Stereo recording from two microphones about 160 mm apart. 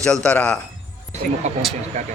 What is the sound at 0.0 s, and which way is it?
Speech, 5° left (ahead or behind).